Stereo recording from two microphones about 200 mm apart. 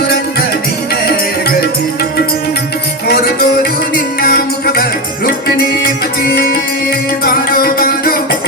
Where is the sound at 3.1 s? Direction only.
50° left (ahead or behind).